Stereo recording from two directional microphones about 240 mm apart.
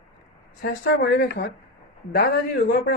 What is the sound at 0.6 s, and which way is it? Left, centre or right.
Speech, left.